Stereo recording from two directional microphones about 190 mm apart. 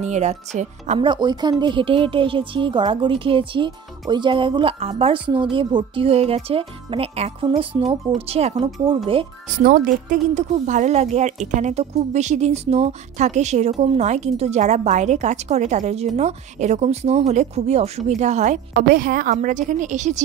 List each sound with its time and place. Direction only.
0.0 s a woman's voice: 35° right (ahead or behind)
9.6 s a woman's voice: 45° right (ahead or behind)